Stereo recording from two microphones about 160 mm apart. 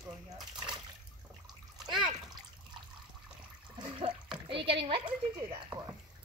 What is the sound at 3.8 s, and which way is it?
Splash, 30° right (ahead or behind).